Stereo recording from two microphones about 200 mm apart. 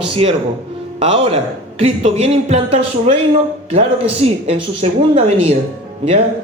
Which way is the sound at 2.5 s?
30° right (ahead or behind).